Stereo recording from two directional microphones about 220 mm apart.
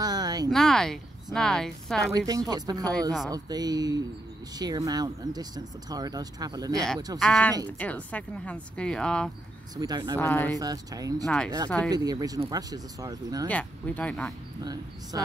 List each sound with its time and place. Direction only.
0.0 s a sound: 15° right (ahead or behind)
0.5 s speech: centre (ahead or behind)
2.1 s speech: 15° right (ahead or behind)
7.2 s speech: 5° left (ahead or behind)
9.8 s speech: 20° right (ahead or behind)
10.1 s speech: 10° left (ahead or behind)
10.6 s speech: 15° right (ahead or behind)
11.2 s speech: 5° left (ahead or behind)
11.9 s speech: 15° right (ahead or behind)
13.5 s speech: 5° left (ahead or behind)
14.6 s speech: 15° right (ahead or behind)